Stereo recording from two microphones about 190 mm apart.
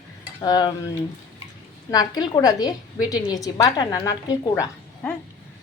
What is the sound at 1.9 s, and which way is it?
A woman's voice, 20° left (ahead or behind).